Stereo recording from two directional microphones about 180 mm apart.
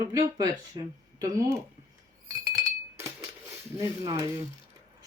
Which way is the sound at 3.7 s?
20° right (ahead or behind).